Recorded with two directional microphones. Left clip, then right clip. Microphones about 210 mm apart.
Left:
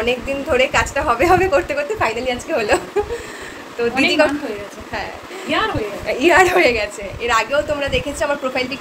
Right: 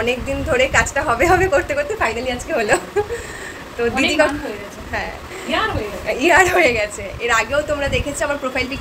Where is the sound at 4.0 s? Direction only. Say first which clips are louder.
Left 1 dB; 15° left (ahead or behind).